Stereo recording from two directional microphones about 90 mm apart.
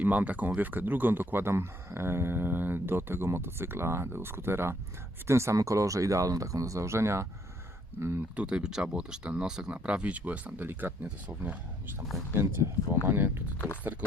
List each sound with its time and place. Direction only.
0.0 s speech: 20° right (ahead or behind)
8.4 s speech: 10° right (ahead or behind)